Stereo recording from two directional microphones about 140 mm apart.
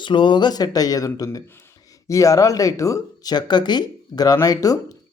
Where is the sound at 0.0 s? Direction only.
35° left (ahead or behind).